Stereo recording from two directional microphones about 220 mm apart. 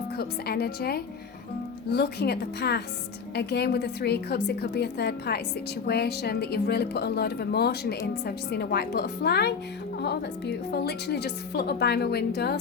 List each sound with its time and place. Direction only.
0.2 s a woman's voice: 45° left (ahead or behind)